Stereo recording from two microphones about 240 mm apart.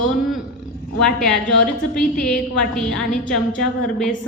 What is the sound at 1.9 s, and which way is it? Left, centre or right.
A woman's voice, centre.